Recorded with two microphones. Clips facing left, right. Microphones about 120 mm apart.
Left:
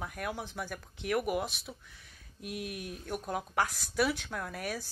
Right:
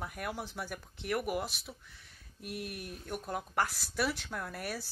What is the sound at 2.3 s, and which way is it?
Speech, 40° right (ahead or behind).